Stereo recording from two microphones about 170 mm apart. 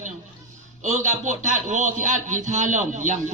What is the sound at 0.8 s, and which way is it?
A man's voice, 45° right (ahead or behind).